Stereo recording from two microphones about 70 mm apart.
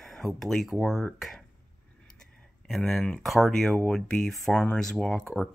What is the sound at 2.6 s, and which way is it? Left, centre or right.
Speech, centre.